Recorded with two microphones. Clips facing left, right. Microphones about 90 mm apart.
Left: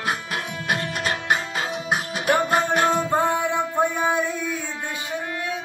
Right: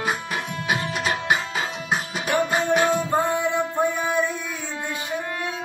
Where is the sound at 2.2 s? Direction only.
60° left (ahead or behind).